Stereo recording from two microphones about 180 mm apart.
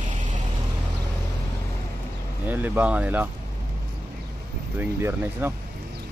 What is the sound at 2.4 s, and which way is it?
Speech, 10° right (ahead or behind).